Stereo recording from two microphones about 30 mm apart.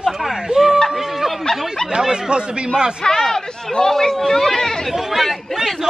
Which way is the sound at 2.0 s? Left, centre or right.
Right.